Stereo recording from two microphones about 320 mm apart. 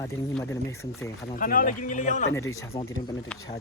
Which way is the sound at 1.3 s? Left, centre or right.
Left.